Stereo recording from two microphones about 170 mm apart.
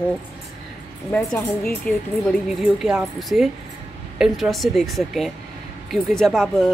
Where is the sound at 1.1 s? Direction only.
10° left (ahead or behind).